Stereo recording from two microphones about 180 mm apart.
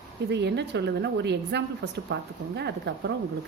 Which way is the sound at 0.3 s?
70° right (ahead or behind).